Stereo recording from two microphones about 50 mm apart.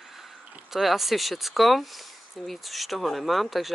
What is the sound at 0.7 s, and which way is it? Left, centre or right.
Speech, centre.